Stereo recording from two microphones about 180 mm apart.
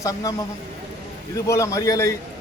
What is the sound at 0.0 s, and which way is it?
Speech, 20° left (ahead or behind).